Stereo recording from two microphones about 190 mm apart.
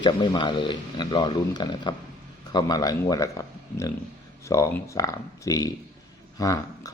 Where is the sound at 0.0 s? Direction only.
25° left (ahead or behind).